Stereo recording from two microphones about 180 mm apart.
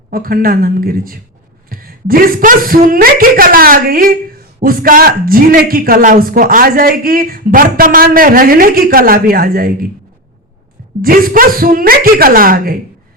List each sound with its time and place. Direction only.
0.1 s a man's voice: 55° right (ahead or behind)
11.0 s a man's voice: 55° right (ahead or behind)